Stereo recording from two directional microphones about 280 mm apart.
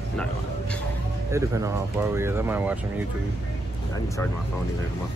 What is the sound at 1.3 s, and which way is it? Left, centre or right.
Speech, centre.